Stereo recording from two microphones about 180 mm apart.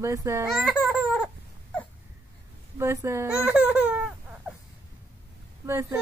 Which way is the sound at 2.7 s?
15° right (ahead or behind).